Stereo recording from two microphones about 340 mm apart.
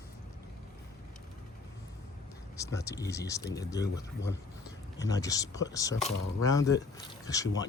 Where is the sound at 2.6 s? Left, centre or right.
Centre.